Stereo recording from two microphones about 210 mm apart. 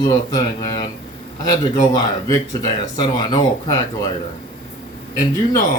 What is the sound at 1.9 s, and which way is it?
Speech, 15° left (ahead or behind).